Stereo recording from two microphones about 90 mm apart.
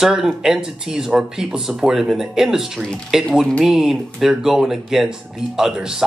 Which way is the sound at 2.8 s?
10° left (ahead or behind).